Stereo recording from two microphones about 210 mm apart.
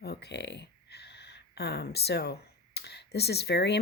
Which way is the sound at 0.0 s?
50° left (ahead or behind).